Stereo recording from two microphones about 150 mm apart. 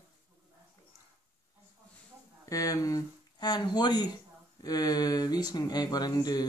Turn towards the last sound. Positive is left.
turn(degrees=25)  # may be behind; listen again after turning